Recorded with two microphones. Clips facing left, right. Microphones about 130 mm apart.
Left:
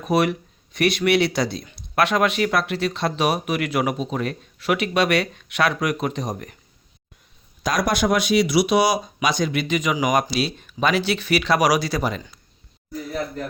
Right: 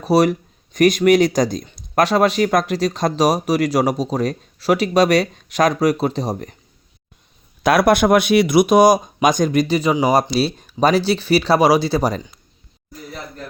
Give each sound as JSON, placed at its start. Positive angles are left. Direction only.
{"t": 0.0, "sound": "speech", "side_deg": -35}
{"t": 7.6, "sound": "speech", "side_deg": -60}